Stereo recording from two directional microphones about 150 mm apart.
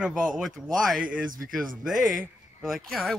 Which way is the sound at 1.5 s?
Centre (ahead or behind).